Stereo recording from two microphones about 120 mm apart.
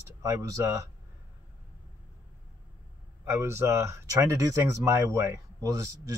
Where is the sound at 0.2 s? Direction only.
25° right (ahead or behind).